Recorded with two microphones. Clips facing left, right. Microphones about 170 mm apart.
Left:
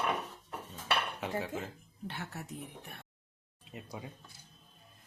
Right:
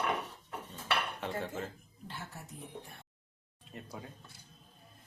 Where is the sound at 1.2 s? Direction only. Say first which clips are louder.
Left 1 dB; 5° left (ahead or behind).